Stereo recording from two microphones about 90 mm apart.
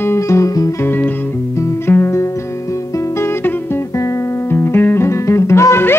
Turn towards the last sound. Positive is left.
turn(degrees=30)  # may be behind; listen again after turning